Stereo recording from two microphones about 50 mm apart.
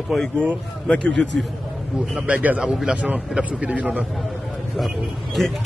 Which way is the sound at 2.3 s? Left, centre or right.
Right.